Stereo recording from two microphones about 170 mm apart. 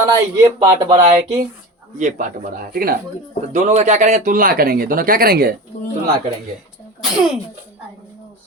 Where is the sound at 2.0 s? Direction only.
50° right (ahead or behind).